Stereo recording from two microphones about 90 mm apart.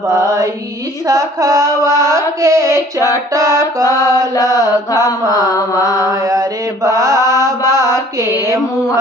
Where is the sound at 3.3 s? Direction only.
35° right (ahead or behind).